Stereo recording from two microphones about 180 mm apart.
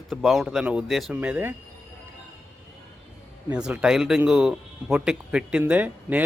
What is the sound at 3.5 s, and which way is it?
Speech, 5° right (ahead or behind).